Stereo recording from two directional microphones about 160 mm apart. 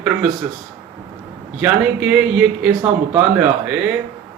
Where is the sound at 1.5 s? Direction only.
5° right (ahead or behind).